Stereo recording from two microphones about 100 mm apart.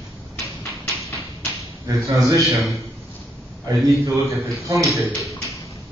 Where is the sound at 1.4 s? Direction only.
30° right (ahead or behind).